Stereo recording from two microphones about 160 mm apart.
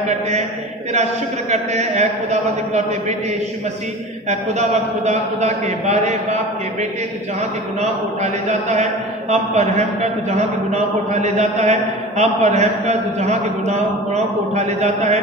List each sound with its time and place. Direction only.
1.5 s a man's voice: 45° right (ahead or behind)
8.2 s a man's voice: 45° right (ahead or behind)